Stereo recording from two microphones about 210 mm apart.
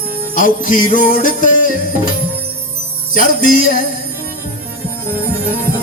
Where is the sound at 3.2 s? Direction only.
40° left (ahead or behind).